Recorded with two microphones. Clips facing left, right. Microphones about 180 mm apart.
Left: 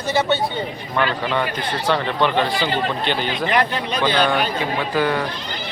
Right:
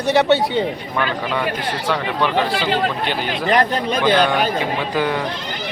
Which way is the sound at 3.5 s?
40° right (ahead or behind).